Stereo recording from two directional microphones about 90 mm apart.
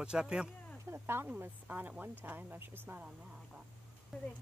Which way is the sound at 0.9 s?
30° right (ahead or behind).